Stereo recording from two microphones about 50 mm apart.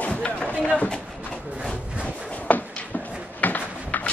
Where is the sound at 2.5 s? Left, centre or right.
Left.